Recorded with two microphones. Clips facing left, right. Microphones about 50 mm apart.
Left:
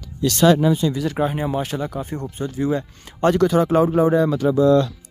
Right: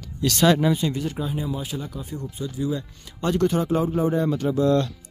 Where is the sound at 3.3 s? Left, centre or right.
Left.